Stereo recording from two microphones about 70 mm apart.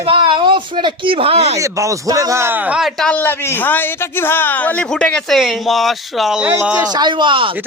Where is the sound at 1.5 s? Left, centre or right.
Right.